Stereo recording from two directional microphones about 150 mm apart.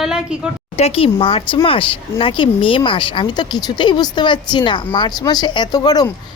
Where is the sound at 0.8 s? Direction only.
40° left (ahead or behind).